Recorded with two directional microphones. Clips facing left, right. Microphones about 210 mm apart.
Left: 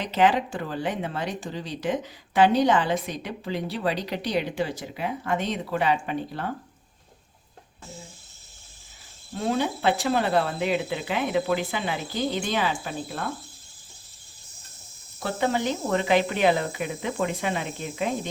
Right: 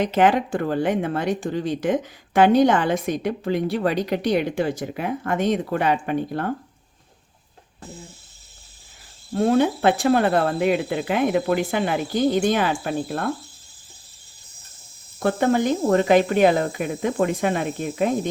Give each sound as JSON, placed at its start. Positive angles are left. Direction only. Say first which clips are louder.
{"t": 0.0, "sound": "speech", "louder": "right 4 dB", "side_deg": -50}
{"t": 9.3, "sound": "speech", "louder": "right 8 dB", "side_deg": -50}
{"t": 15.2, "sound": "speech", "louder": "right 6 dB", "side_deg": -50}